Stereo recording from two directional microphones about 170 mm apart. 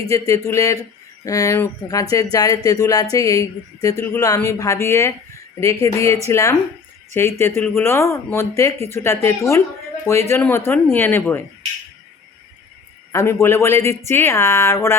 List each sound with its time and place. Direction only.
0.0 s speech: 20° left (ahead or behind)
13.1 s speech: 15° left (ahead or behind)